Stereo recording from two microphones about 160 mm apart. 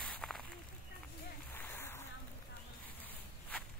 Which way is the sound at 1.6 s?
15° left (ahead or behind).